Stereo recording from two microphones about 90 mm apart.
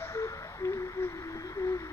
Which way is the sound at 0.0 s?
30° left (ahead or behind).